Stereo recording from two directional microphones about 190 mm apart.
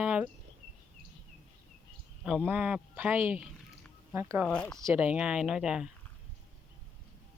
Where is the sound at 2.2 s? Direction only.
5° right (ahead or behind).